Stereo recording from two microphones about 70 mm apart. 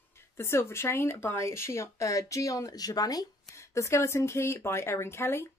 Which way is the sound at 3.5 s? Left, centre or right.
Left.